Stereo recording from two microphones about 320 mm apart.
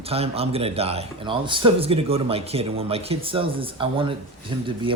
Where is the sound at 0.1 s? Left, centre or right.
Centre.